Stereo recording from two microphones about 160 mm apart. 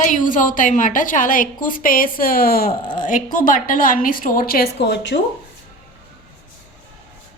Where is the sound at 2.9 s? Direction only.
55° left (ahead or behind).